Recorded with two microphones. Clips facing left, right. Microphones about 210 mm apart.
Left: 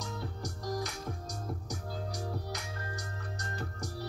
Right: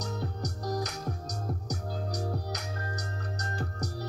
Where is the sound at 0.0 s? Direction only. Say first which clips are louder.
Right 4 dB; 40° right (ahead or behind).